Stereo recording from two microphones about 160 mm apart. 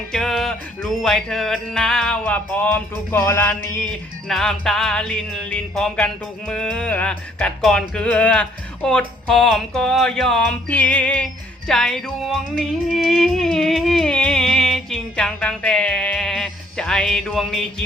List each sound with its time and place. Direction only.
0.1 s music: centre (ahead or behind)
4.3 s music: centre (ahead or behind)